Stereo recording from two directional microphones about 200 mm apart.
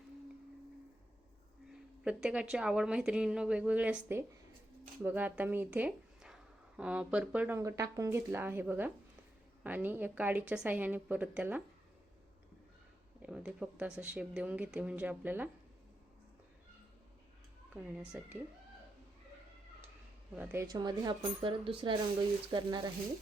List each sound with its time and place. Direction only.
2.0 s a woman's voice: 5° right (ahead or behind)
13.2 s a woman's voice: 5° right (ahead or behind)
17.7 s a woman's voice: 5° right (ahead or behind)
20.3 s speech: 10° right (ahead or behind)